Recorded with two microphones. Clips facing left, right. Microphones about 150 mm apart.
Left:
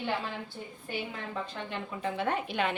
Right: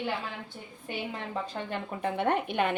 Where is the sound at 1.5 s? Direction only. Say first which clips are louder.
Right 3 dB; 50° right (ahead or behind).